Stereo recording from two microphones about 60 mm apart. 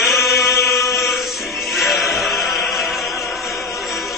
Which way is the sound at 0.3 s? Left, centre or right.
Left.